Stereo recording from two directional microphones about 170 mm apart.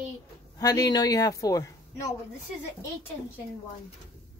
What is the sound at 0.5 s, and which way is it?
Speech, 20° left (ahead or behind).